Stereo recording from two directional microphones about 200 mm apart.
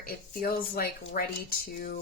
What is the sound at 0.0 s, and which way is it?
Speech, 45° left (ahead or behind).